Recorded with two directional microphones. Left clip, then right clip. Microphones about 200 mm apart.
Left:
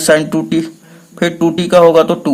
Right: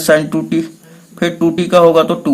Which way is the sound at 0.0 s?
25° left (ahead or behind).